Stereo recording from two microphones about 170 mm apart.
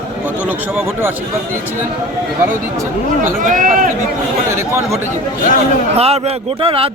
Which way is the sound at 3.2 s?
50° right (ahead or behind).